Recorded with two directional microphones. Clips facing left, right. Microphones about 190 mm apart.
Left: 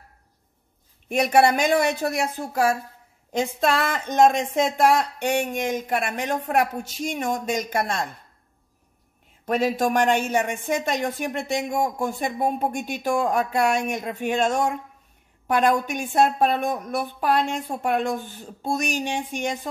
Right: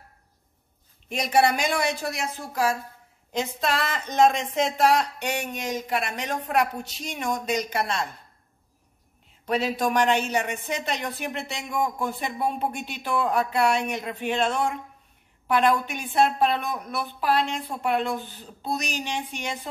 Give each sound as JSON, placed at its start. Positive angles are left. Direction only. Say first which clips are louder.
{"t": 1.0, "sound": "speech", "louder": "left 4 dB", "side_deg": 55}
{"t": 3.3, "sound": "a woman's voice", "louder": "left 4 dB", "side_deg": 50}
{"t": 9.5, "sound": "a woman's voice", "louder": "left 3 dB", "side_deg": 50}